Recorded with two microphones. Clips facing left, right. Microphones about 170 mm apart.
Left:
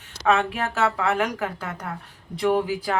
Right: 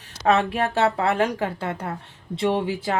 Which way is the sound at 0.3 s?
35° right (ahead or behind).